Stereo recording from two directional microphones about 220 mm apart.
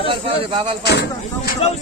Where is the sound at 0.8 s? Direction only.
50° left (ahead or behind).